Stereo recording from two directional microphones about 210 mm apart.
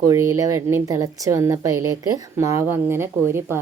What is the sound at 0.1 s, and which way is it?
A woman's voice, 15° right (ahead or behind).